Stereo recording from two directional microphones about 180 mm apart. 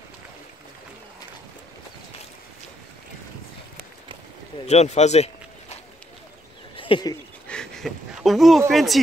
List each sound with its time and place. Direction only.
4.6 s speech: 35° left (ahead or behind)
6.8 s speech: 25° left (ahead or behind)
7.4 s speech: 5° left (ahead or behind)